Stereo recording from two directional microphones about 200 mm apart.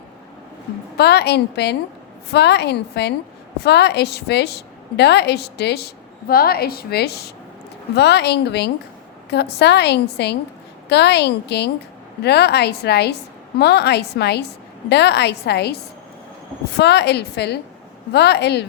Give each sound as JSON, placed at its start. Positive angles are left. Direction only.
{"t": 0.9, "sound": "a woman's voice", "side_deg": 55}